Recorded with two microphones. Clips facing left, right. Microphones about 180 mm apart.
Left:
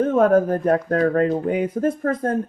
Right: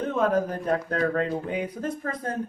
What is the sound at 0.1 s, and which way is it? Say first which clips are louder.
Speech: left 5 dB; 50° left (ahead or behind).